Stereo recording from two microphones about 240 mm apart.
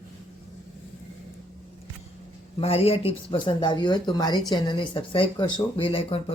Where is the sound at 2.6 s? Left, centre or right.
Left.